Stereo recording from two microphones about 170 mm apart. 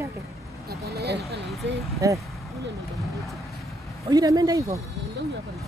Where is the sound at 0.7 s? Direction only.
70° right (ahead or behind).